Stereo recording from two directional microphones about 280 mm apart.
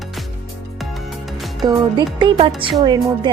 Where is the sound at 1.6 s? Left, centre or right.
Centre.